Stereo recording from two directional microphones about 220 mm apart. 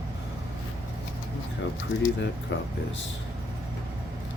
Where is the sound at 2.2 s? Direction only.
55° left (ahead or behind).